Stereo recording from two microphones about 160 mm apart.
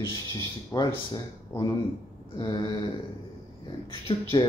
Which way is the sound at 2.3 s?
30° left (ahead or behind).